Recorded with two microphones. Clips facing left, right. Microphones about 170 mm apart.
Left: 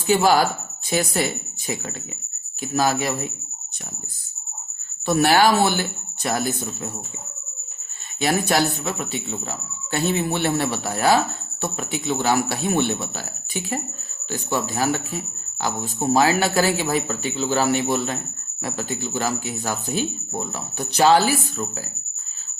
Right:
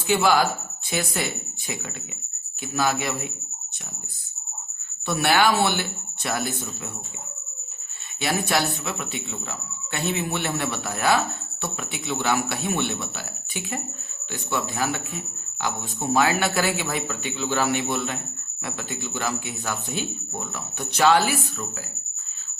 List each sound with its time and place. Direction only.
0.1 s speech: 40° left (ahead or behind)
2.7 s speech: 40° left (ahead or behind)
5.0 s speech: 40° left (ahead or behind)
8.2 s speech: 40° left (ahead or behind)